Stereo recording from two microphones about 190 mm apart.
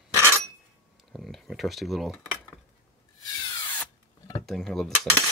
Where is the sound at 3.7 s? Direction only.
10° left (ahead or behind).